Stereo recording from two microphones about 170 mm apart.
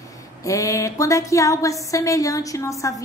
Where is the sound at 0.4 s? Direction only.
20° left (ahead or behind).